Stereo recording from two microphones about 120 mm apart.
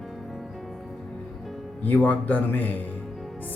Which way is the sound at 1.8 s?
15° left (ahead or behind).